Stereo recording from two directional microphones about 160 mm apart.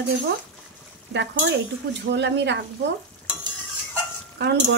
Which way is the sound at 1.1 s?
90° right.